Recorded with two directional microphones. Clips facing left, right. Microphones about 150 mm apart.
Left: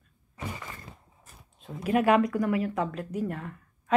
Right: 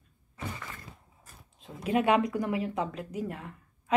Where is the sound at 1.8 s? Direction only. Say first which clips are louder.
Left 3 dB; 25° right (ahead or behind).